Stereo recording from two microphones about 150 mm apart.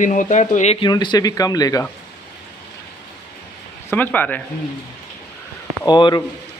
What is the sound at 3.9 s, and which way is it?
Speech, 10° left (ahead or behind).